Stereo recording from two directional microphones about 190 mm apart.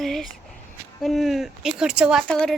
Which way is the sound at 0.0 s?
Centre (ahead or behind).